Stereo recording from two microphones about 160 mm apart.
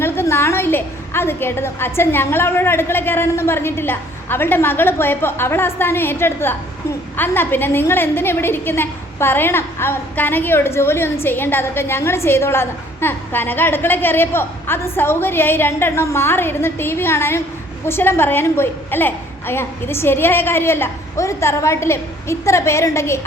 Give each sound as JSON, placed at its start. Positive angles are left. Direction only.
{"t": 0.0, "sound": "a woman's voice", "side_deg": 15}